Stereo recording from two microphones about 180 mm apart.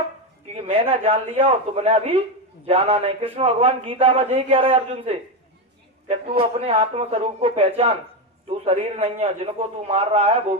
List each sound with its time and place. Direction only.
0.5 s speech: 30° right (ahead or behind)
6.4 s speech: 35° right (ahead or behind)